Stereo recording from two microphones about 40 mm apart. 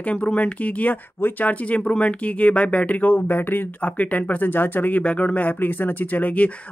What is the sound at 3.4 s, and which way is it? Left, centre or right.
Speech, left.